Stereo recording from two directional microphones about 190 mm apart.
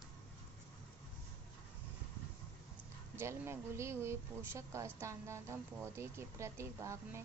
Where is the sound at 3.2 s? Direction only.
15° right (ahead or behind).